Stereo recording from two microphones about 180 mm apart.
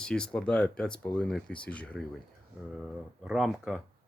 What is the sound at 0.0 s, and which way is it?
Speech, 5° left (ahead or behind).